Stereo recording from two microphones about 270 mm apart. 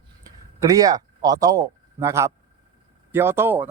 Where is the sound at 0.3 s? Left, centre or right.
Centre.